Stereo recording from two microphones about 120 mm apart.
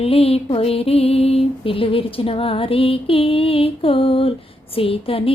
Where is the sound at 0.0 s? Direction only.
55° left (ahead or behind).